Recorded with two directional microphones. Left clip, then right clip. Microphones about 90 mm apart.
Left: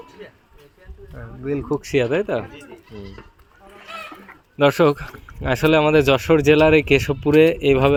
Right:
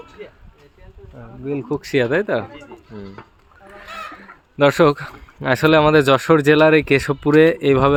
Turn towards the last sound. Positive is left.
turn(degrees=-35)  # may be behind; listen again after turning